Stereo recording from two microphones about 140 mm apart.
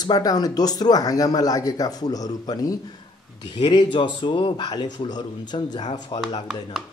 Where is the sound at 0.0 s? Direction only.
30° left (ahead or behind).